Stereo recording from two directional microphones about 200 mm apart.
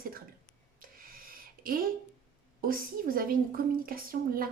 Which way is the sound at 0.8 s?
45° right (ahead or behind).